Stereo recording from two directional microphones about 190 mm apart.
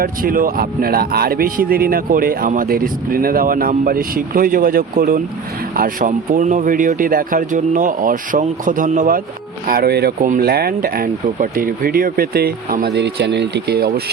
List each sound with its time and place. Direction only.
0.0 s speech: 50° right (ahead or behind)